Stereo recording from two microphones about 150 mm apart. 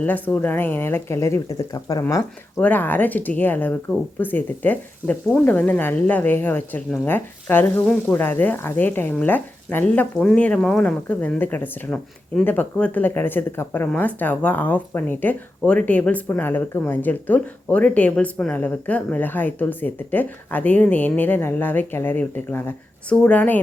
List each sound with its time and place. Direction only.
0.0 s speech: 10° left (ahead or behind)
2.6 s speech: 10° left (ahead or behind)